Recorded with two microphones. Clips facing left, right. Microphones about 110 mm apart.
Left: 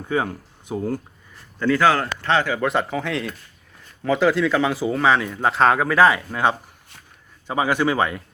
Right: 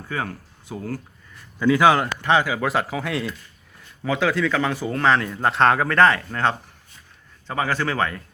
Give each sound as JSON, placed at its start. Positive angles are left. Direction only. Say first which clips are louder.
{"t": 0.1, "sound": "speech", "louder": "left 6 dB", "side_deg": 20}
{"t": 1.5, "sound": "speech", "louder": "right 1 dB", "side_deg": -15}